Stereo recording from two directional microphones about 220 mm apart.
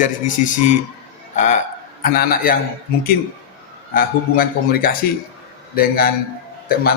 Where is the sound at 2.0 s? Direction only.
40° left (ahead or behind).